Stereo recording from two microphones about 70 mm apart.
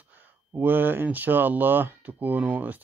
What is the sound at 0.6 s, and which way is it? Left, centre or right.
Speech, right.